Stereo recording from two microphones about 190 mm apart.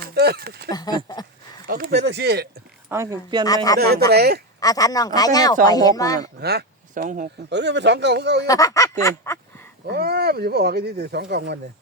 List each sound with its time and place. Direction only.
0.1 s a sound: 55° right (ahead or behind)
0.7 s speech: 20° left (ahead or behind)
1.6 s speech: 55° right (ahead or behind)
2.9 s speech: 15° right (ahead or behind)
3.4 s speech: 20° left (ahead or behind)
4.1 s speech: 55° right (ahead or behind)
4.6 s speech: 20° left (ahead or behind)
6.4 s speech: 60° right (ahead or behind)
7.5 s speech: 65° right (ahead or behind)
8.4 s a sound: 15° left (ahead or behind)
9.8 s speech: 55° right (ahead or behind)